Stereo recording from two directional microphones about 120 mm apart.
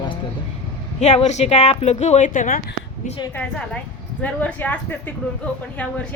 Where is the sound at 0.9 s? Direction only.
70° left (ahead or behind); by 2.5 s 90° left.